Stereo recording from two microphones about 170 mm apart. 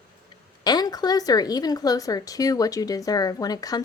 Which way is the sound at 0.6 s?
25° left (ahead or behind).